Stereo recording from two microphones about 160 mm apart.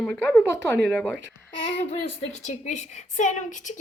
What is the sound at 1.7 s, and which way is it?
A woman's voice, 40° left (ahead or behind).